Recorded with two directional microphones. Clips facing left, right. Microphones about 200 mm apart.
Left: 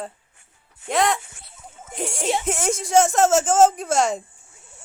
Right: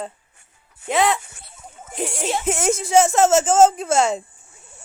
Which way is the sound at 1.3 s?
45° right (ahead or behind).